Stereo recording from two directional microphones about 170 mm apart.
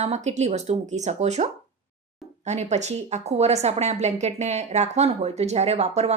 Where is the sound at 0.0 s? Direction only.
40° right (ahead or behind).